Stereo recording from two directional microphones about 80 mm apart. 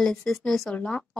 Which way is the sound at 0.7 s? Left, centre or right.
Centre.